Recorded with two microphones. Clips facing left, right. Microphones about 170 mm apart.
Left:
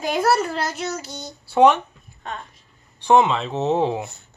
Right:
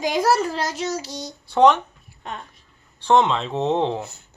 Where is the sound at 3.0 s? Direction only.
10° left (ahead or behind).